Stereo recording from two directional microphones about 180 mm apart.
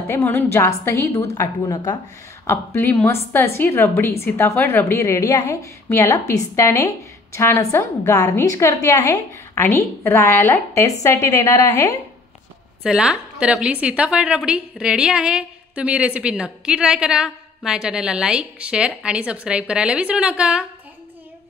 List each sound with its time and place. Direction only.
0.1 s a woman's voice: 10° left (ahead or behind)
12.8 s a woman's voice: 5° right (ahead or behind)